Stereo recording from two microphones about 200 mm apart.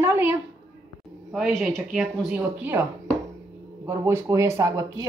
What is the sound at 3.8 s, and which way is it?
Speech, 15° right (ahead or behind).